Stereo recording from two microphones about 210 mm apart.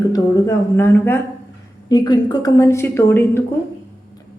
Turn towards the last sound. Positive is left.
turn(degrees=10)  # may be behind; listen again after turning